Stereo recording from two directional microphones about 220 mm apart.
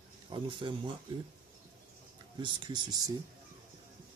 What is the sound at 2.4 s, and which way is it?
Speech, 20° right (ahead or behind).